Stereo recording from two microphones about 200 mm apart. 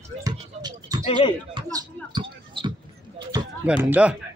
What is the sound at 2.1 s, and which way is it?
Basketball bounce, 25° right (ahead or behind).